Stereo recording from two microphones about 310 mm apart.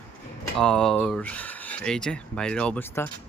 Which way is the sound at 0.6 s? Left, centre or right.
Centre.